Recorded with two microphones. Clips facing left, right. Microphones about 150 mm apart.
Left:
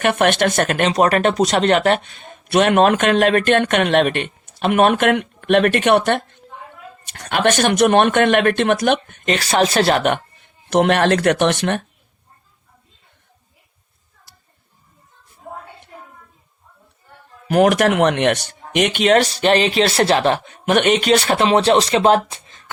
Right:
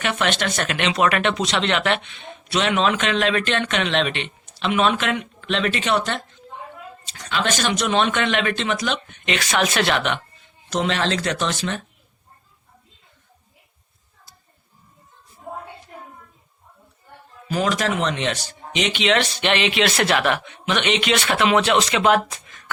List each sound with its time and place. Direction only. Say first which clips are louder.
0.0 s speech: left 7 dB; 55° left (ahead or behind)
17.5 s speech: left 8 dB; 65° left (ahead or behind); by 22.7 s 30° left (ahead or behind)